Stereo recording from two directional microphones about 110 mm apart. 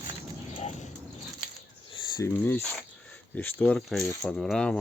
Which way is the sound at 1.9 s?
45° left (ahead or behind).